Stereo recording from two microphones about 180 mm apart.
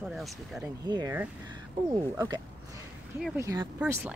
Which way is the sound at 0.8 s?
20° right (ahead or behind).